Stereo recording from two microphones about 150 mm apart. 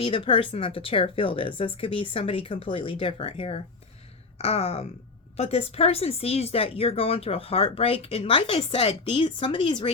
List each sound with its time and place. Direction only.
0.0 s speech: 35° left (ahead or behind)